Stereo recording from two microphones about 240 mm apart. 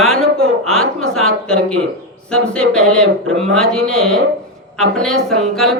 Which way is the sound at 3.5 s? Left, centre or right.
Centre.